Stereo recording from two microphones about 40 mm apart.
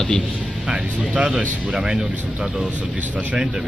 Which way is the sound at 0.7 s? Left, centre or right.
Centre.